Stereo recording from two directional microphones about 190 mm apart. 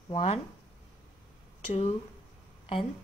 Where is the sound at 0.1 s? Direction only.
35° left (ahead or behind).